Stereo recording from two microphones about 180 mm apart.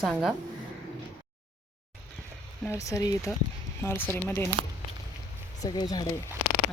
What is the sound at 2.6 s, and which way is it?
Speech, 15° left (ahead or behind).